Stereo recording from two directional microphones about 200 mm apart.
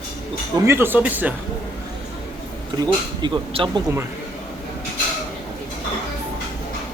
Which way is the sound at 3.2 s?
25° right (ahead or behind).